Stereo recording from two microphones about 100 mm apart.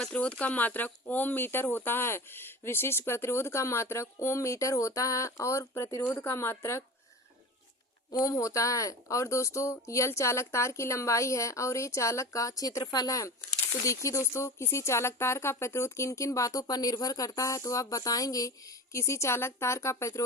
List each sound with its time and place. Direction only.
0.0 s speech: 15° left (ahead or behind); by 6.8 s 30° left (ahead or behind)
8.1 s speech: 35° left (ahead or behind)